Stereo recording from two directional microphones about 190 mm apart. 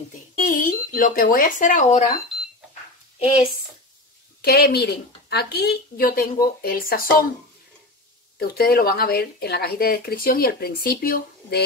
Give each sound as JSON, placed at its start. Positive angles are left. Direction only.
{"t": 0.4, "sound": "speech", "side_deg": 45}
{"t": 4.4, "sound": "a woman's voice", "side_deg": 55}
{"t": 8.4, "sound": "speech", "side_deg": 55}